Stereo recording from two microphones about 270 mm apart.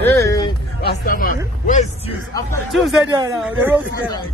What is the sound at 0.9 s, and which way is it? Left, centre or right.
Speech, left.